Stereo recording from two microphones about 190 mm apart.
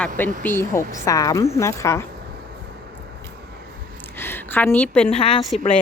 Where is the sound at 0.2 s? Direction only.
10° left (ahead or behind).